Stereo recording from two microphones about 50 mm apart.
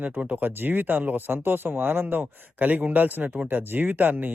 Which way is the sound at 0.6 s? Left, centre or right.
Right.